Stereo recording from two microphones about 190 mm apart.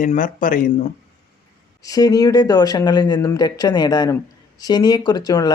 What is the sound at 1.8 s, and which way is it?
Speech, 20° left (ahead or behind).